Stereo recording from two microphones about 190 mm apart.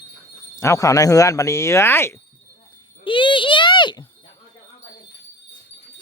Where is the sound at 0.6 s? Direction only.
15° left (ahead or behind).